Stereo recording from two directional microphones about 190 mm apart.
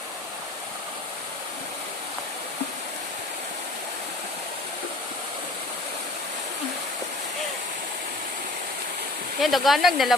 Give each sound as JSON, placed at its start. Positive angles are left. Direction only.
{"t": 9.4, "sound": "speech", "side_deg": 0}